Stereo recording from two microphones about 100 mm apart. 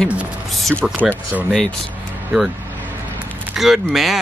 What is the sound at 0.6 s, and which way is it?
Speech, centre (ahead or behind).